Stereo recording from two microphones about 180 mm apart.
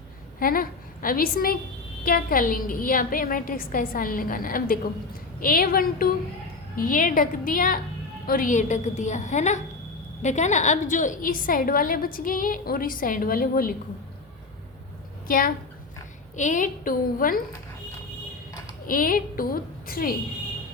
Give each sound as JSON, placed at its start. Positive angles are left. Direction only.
{"t": 0.3, "sound": "a woman's voice", "side_deg": 50}
{"t": 15.3, "sound": "a woman's voice", "side_deg": 50}
{"t": 18.9, "sound": "a woman's voice", "side_deg": 50}